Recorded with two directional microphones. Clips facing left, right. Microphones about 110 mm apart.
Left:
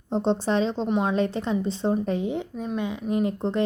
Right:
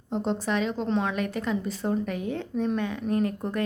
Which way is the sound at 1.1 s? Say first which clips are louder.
Left 4 dB; 30° left (ahead or behind).